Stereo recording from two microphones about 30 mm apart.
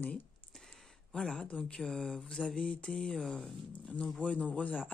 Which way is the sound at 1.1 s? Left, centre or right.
Left.